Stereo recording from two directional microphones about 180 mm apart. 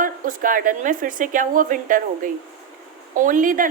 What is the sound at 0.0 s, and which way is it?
Speech, 50° right (ahead or behind).